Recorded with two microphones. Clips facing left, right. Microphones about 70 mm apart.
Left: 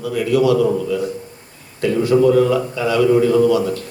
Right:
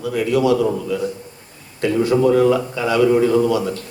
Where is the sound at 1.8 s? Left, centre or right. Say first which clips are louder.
Left 2 dB; right.